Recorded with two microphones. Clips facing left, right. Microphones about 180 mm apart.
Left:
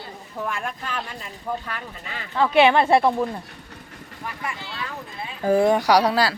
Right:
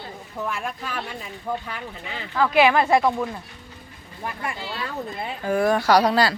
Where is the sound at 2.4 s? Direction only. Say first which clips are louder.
Left 1 dB; 30° left (ahead or behind).